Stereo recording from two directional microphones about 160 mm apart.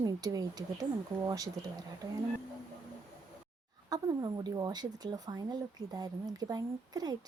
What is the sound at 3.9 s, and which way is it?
A woman's voice, 25° right (ahead or behind).